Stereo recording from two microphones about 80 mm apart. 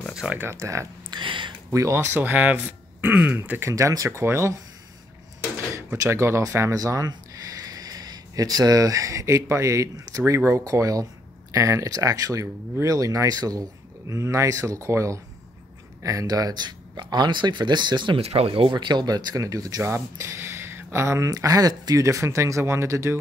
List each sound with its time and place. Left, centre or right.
0.1 s a sound: centre
0.4 s speech: right
1.1 s a sound: right
1.7 s speech: right
2.0 s speech: right
6.0 s speech: right
19.8 s speech: right